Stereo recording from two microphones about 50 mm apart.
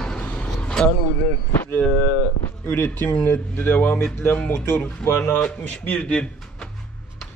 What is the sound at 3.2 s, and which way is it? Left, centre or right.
Speech, left.